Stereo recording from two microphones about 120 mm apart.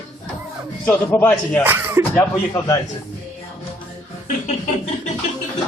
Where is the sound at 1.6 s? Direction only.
20° right (ahead or behind).